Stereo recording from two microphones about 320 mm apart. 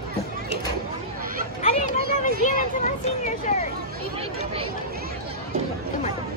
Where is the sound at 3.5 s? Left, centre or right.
Left.